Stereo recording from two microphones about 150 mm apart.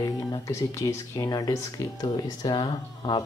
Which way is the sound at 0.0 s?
20° left (ahead or behind).